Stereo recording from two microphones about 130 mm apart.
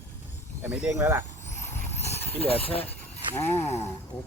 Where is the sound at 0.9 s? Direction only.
20° right (ahead or behind).